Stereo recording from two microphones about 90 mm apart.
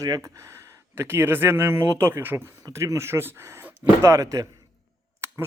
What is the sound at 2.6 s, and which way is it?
Speech, 40° right (ahead or behind).